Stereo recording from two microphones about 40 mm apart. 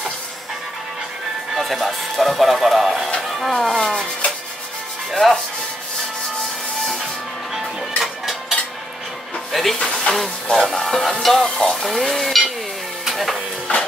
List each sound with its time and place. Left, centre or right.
1.5 s speech: centre
3.3 s a sound: centre
3.5 s music: centre
5.1 s speech: centre
7.5 s music: centre
9.5 s music: centre
9.8 s speech: centre
10.1 s music: centre
11.7 s speech: centre
13.0 s a sound: centre